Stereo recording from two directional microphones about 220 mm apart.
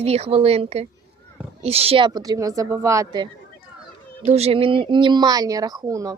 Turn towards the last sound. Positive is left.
turn(degrees=-15)  # may be behind; listen again after turning